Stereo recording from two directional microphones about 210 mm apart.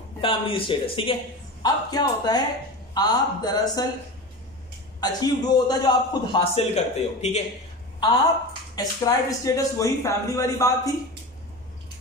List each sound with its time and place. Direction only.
0.2 s a man's voice: 25° left (ahead or behind)
5.0 s a man's voice: 20° left (ahead or behind)
8.7 s speech: 15° left (ahead or behind)